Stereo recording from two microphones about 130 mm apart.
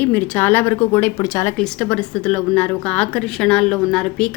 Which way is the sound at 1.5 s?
5° left (ahead or behind).